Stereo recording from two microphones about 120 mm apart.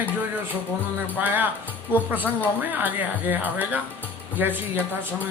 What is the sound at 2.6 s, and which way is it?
Speech, 15° right (ahead or behind).